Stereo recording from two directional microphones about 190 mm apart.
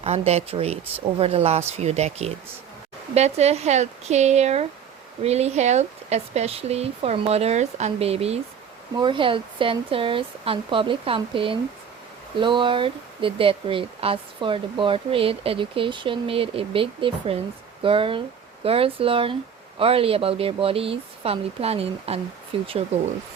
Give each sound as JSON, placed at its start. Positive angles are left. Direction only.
{"t": 0.0, "sound": "speech", "side_deg": -35}